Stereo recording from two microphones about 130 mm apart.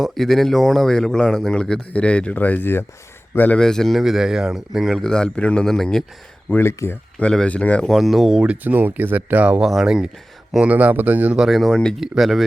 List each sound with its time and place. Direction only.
0.0 s speech: centre (ahead or behind)
6.5 s speech: 20° left (ahead or behind)
7.3 s speech: 10° left (ahead or behind)